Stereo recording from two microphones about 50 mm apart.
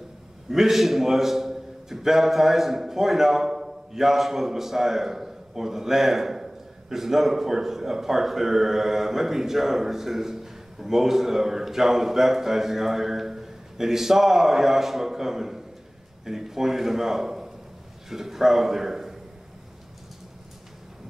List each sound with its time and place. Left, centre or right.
0.5 s a man's voice: centre